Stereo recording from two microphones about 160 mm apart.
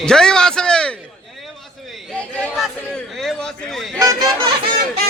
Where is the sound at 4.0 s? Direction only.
25° right (ahead or behind).